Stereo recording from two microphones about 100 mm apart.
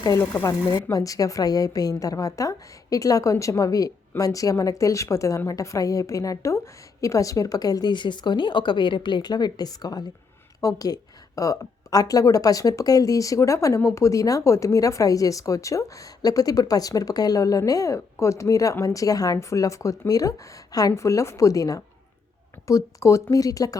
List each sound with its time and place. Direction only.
0.4 s a woman's voice: 35° left (ahead or behind)